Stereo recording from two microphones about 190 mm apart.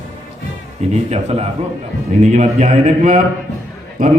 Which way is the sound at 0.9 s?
35° right (ahead or behind).